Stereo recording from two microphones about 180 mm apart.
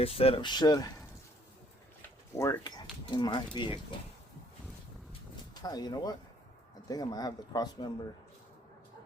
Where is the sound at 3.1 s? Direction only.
25° left (ahead or behind).